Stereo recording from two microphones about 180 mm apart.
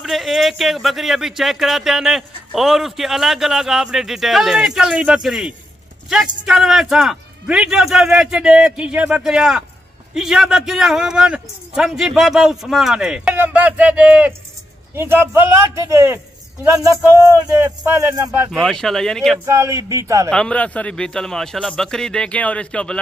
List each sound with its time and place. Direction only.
0.0 s speech: centre (ahead or behind)
17.6 s speech: 15° right (ahead or behind)
18.5 s speech: 5° left (ahead or behind)
19.4 s speech: 15° right (ahead or behind)
20.2 s speech: 5° left (ahead or behind)